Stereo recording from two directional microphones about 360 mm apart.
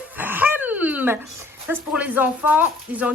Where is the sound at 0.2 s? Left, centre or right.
Centre.